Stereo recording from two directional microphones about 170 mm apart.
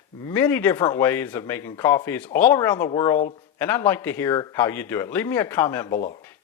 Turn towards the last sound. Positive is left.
turn(degrees=15)  # may be behind; listen again after turning